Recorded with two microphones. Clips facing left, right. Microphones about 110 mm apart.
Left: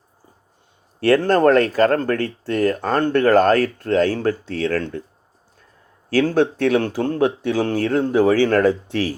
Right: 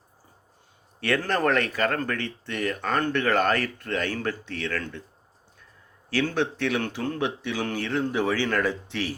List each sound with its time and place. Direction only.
0.9 s speech: 40° left (ahead or behind)
6.1 s speech: 45° left (ahead or behind)